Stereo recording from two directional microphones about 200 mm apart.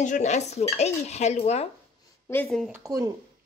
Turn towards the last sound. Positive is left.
turn(degrees=-15)  # may be behind; listen again after turning